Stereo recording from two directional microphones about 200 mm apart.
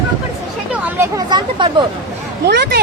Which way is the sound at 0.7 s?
15° right (ahead or behind).